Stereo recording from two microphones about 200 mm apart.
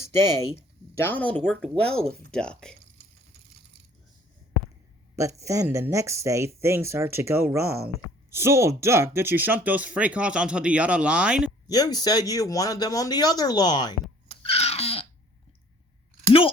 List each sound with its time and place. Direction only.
0.0 s speech: 15° left (ahead or behind)
5.1 s speech: 15° right (ahead or behind)
11.7 s speech: 20° left (ahead or behind)
14.4 s a sound: 30° left (ahead or behind)